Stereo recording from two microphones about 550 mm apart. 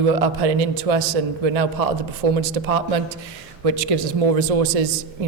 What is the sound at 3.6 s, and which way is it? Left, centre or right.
A man's voice, right.